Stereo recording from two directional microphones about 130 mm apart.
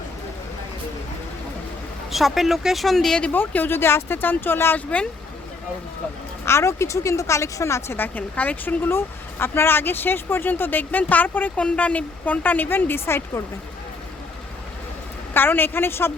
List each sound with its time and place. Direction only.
2.0 s speech: centre (ahead or behind)
6.4 s speech: 20° left (ahead or behind)
15.3 s speech: 15° left (ahead or behind)